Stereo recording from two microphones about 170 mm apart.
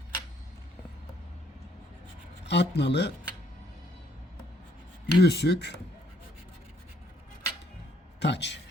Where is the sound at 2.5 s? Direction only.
90° left.